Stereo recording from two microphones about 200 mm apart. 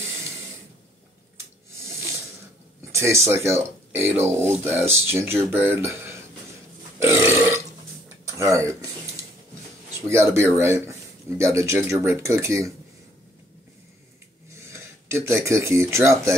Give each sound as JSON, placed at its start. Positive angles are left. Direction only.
{"t": 3.0, "sound": "speech", "side_deg": -15}
{"t": 7.0, "sound": "burping", "side_deg": -15}
{"t": 8.4, "sound": "a sound", "side_deg": -15}
{"t": 9.9, "sound": "speech", "side_deg": -15}
{"t": 14.7, "sound": "speech", "side_deg": -15}